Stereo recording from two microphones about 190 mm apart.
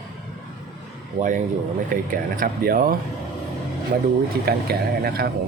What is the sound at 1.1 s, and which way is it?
Speech, 40° right (ahead or behind).